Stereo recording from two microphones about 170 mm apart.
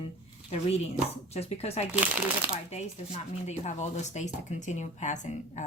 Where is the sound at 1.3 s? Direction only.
40° left (ahead or behind).